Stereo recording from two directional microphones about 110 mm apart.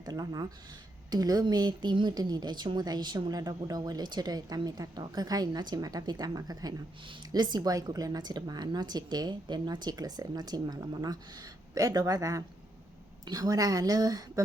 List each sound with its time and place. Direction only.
0.0 s speech: 35° right (ahead or behind)